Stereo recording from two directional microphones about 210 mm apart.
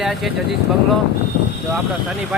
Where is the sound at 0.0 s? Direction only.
Centre (ahead or behind).